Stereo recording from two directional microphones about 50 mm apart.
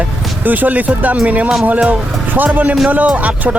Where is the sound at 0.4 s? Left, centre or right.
Right.